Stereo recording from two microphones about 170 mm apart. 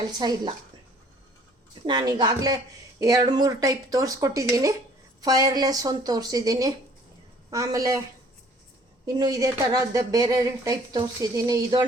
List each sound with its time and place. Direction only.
0.2 s a woman's voice: 25° right (ahead or behind)
1.9 s a woman's voice: 25° right (ahead or behind)
9.0 s a woman's voice: 25° right (ahead or behind)